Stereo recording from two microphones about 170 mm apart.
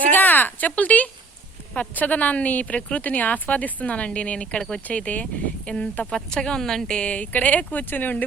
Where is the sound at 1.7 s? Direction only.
10° left (ahead or behind).